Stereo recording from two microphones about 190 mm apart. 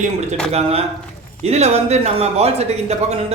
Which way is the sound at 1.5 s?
35° right (ahead or behind).